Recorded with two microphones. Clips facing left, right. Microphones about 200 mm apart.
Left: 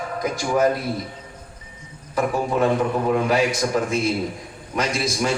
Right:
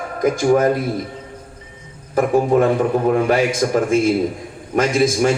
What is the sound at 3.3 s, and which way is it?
A man's voice, 50° right (ahead or behind).